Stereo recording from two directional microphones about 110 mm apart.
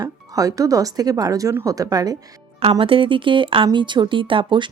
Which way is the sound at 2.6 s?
60° right (ahead or behind).